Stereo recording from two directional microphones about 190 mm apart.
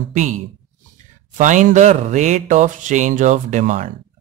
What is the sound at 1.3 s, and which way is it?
Speech, 40° right (ahead or behind).